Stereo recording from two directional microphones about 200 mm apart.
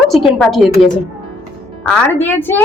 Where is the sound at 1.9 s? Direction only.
10° left (ahead or behind).